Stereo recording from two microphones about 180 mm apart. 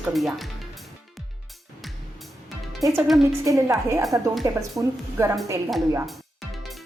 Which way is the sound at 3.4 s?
15° right (ahead or behind).